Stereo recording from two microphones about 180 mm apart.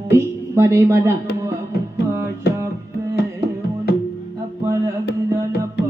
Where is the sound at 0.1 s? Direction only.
15° right (ahead or behind).